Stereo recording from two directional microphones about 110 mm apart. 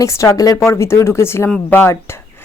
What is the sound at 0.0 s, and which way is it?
A woman's voice, 25° left (ahead or behind).